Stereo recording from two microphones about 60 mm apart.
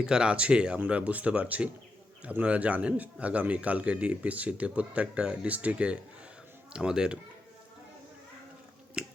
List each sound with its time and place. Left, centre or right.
0.0 s speech: centre
9.0 s finger snapping: centre